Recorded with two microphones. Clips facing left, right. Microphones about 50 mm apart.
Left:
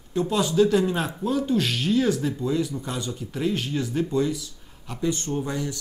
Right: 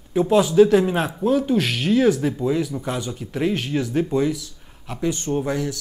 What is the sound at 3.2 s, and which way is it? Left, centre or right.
Speech, right.